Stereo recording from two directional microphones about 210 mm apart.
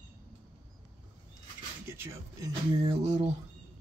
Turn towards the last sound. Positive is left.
turn(degrees=-30)  # may be behind; listen again after turning